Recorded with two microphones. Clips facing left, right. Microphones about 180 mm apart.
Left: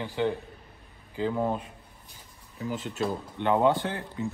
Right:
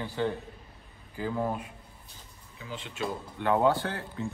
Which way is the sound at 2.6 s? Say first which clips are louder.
Left 7 dB; 40° left (ahead or behind).